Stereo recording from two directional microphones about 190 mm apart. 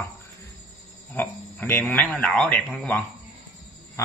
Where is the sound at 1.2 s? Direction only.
10° left (ahead or behind).